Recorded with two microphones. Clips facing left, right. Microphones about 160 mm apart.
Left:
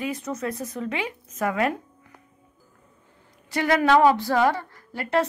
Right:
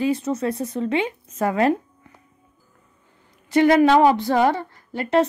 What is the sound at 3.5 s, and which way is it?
A woman's voice, 25° right (ahead or behind).